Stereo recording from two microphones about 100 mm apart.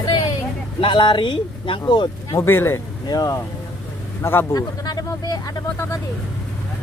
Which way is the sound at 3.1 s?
40° left (ahead or behind).